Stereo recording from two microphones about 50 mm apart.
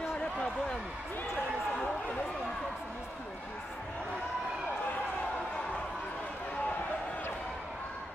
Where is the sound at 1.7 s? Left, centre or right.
Left.